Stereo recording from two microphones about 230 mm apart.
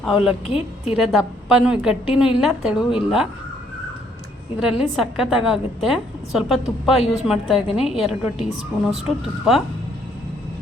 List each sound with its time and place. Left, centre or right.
0.4 s a woman's voice: left
0.9 s a woman's voice: centre
4.6 s a woman's voice: centre